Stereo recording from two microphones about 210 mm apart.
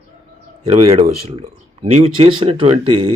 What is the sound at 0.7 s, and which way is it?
Speech, 30° right (ahead or behind).